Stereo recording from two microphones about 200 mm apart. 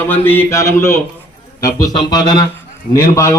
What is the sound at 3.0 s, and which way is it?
Speech, 15° left (ahead or behind).